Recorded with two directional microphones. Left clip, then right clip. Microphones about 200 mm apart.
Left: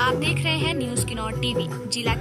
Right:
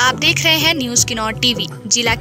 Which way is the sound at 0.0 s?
25° right (ahead or behind).